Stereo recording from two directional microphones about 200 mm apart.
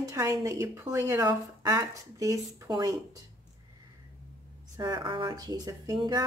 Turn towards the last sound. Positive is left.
turn(degrees=-20)  # may be behind; listen again after turning